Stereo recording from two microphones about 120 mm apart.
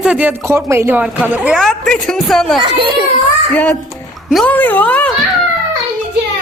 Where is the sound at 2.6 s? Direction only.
40° right (ahead or behind).